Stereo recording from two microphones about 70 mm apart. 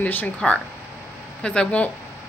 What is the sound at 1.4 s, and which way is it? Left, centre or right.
Speech, centre.